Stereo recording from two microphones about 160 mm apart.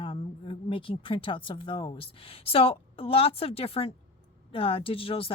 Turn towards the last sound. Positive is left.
turn(degrees=35)  # may be behind; listen again after turning